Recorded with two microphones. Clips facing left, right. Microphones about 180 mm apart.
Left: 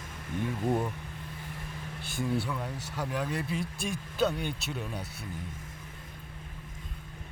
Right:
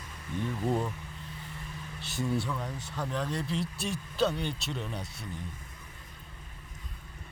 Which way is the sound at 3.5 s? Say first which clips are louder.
Even; 55° left (ahead or behind).